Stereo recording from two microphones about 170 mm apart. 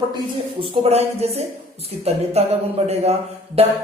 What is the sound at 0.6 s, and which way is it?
Speech, 35° right (ahead or behind).